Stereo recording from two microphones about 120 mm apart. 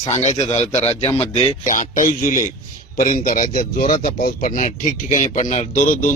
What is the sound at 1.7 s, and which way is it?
Speech, 90° left.